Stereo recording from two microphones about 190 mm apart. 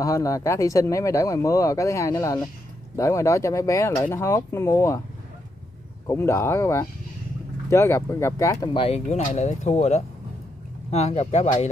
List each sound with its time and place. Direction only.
0.0 s speech: 15° left (ahead or behind)
6.0 s speech: 15° left (ahead or behind); by 11.5 s 35° left (ahead or behind)